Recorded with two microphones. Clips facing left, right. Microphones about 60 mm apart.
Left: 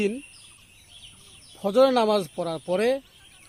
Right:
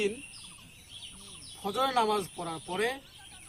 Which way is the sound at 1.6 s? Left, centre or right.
Left.